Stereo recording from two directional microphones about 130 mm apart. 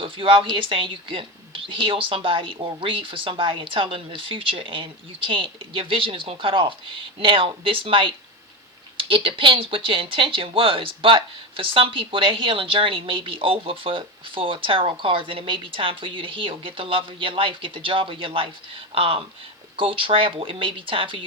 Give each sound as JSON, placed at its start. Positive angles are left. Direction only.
{"t": 0.0, "sound": "speech", "side_deg": -45}